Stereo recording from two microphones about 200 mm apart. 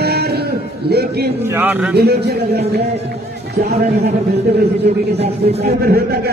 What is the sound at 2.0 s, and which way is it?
Speech, 55° right (ahead or behind).